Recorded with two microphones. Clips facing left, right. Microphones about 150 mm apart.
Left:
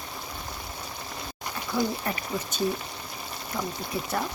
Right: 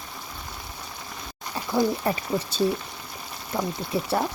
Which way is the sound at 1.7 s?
20° right (ahead or behind).